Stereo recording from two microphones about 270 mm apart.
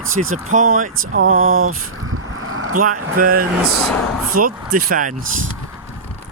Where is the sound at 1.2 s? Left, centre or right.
Right.